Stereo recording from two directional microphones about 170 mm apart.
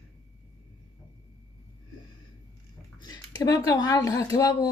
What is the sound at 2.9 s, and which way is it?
Speech, 20° left (ahead or behind).